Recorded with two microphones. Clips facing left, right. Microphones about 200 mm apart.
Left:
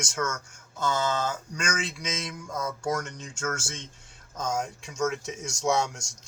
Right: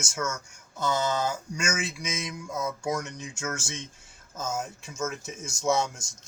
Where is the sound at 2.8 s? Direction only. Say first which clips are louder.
Even; 15° right (ahead or behind).